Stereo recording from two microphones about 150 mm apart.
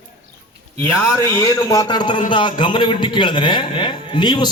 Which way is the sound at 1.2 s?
20° left (ahead or behind).